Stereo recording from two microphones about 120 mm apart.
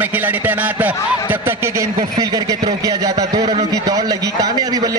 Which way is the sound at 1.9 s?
35° right (ahead or behind).